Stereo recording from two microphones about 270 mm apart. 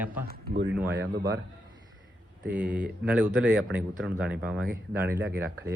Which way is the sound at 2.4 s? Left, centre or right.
Centre.